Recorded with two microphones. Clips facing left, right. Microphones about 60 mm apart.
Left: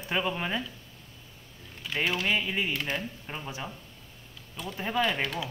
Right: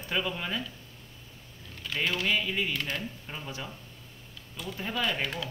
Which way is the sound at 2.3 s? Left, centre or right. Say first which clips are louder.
Left 1 dB; left.